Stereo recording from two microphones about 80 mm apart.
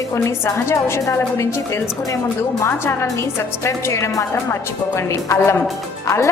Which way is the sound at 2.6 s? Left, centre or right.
Left.